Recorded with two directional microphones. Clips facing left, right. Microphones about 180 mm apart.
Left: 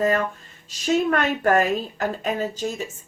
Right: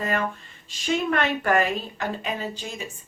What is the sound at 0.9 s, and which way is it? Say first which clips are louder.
A woman's voice: left 3 dB; 40° left (ahead or behind).